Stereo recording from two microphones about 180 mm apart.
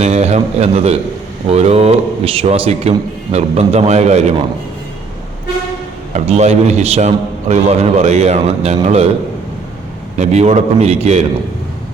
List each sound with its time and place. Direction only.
0.0 s a man's voice: 40° right (ahead or behind)
6.1 s a man's voice: 35° right (ahead or behind)
10.2 s a man's voice: 40° right (ahead or behind)